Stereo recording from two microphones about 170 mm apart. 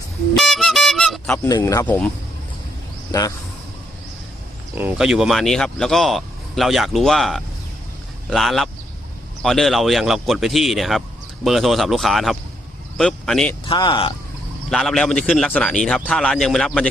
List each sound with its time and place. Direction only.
0.3 s music: centre (ahead or behind)
1.5 s speech: 20° left (ahead or behind)
3.1 s a man's voice: 20° left (ahead or behind)
4.7 s speech: 10° right (ahead or behind)
13.7 s speech: 25° left (ahead or behind)
14.7 s speech: centre (ahead or behind)